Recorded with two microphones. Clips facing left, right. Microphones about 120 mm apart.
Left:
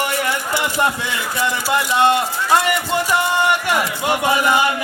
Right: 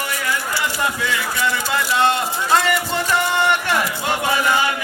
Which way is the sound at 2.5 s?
15° left (ahead or behind).